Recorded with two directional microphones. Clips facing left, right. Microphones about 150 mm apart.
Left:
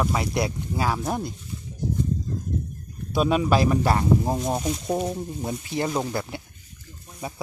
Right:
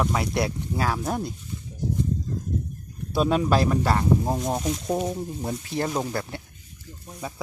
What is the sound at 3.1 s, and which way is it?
Speech, 5° left (ahead or behind).